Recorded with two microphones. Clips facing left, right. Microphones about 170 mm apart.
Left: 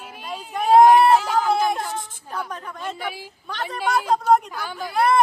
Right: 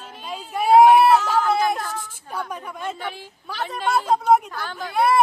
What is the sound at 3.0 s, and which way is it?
Speech, 10° left (ahead or behind).